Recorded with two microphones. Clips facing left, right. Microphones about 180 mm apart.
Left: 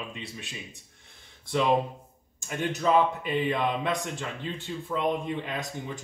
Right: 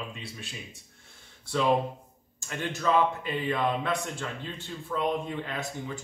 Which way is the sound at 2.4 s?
20° left (ahead or behind).